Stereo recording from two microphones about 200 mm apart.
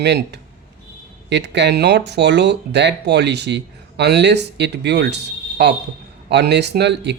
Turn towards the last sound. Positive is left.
turn(degrees=-60)  # may be behind; listen again after turning